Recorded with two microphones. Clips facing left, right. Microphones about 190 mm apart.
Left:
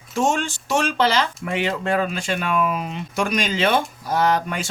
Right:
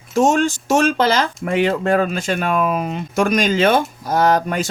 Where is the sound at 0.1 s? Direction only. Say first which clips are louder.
Right 6 dB; 40° right (ahead or behind).